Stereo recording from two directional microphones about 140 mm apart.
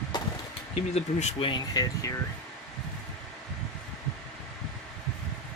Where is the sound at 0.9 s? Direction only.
50° left (ahead or behind).